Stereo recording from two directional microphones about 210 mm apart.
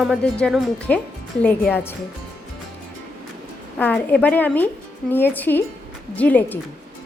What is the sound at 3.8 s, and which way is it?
A woman's voice, 5° left (ahead or behind).